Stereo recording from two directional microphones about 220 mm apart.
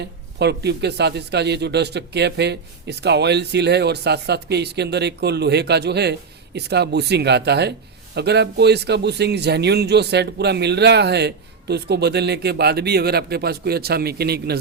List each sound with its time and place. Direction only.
0.0 s speech: 50° right (ahead or behind)